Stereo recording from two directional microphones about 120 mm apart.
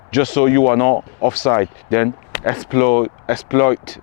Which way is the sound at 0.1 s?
20° left (ahead or behind).